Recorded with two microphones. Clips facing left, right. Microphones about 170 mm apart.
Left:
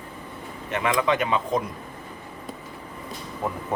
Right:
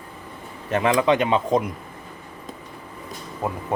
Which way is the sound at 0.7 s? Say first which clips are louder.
Right 4 dB; 30° right (ahead or behind).